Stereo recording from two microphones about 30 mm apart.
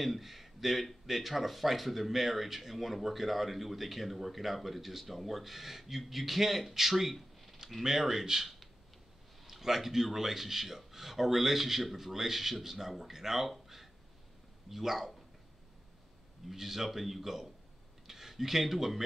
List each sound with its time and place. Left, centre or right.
0.0 s a man's voice: centre
7.6 s a sound: centre
8.0 s a man's voice: centre
13.5 s a sound: centre
14.7 s speech: centre
16.4 s speech: centre